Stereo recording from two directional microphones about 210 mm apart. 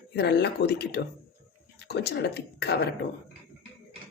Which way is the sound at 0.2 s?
50° left (ahead or behind).